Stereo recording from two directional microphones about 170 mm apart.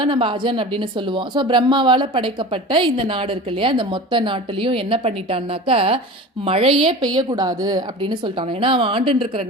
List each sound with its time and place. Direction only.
0.0 s a woman's voice: 30° right (ahead or behind)